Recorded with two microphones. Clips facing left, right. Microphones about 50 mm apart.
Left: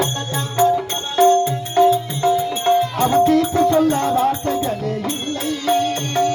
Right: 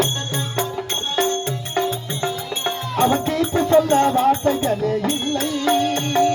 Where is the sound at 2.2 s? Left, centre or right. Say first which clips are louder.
Left 5 dB; centre.